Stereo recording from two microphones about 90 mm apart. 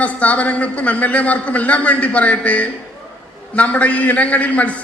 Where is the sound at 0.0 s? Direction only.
15° left (ahead or behind).